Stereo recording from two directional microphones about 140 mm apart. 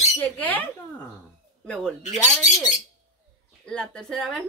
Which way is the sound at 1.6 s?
5° left (ahead or behind).